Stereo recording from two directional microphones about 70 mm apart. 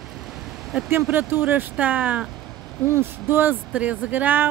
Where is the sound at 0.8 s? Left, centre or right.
Right.